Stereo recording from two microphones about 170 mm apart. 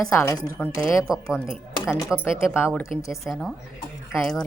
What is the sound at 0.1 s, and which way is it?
Speech, 15° left (ahead or behind).